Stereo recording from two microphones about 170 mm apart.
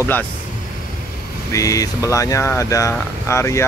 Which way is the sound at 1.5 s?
20° left (ahead or behind).